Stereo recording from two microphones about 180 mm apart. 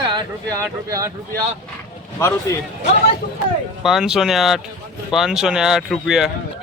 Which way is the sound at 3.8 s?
Centre (ahead or behind).